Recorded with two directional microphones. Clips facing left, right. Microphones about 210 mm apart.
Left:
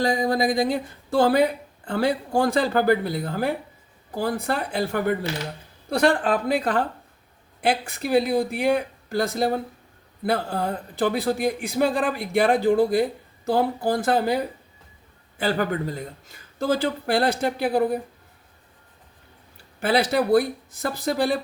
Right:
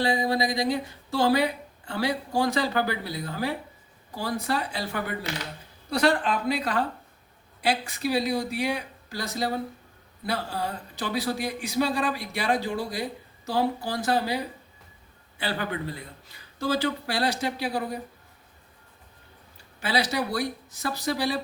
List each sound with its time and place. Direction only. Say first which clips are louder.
0.0 s a man's voice: left 3 dB; 45° left (ahead or behind)
19.8 s a man's voice: left 6 dB; 55° left (ahead or behind)